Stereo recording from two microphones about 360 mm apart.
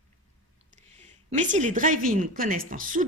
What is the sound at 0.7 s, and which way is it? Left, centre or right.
Speech, centre.